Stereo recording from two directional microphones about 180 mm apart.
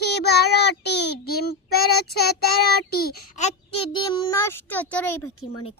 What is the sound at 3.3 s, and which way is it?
A child's voice, 35° left (ahead or behind).